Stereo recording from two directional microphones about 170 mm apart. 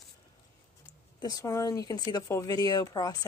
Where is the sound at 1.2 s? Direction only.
20° left (ahead or behind).